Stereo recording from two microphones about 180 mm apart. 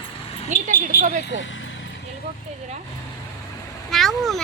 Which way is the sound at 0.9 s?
55° left (ahead or behind).